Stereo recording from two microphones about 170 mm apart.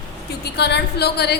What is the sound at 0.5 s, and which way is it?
Speech, 75° left (ahead or behind).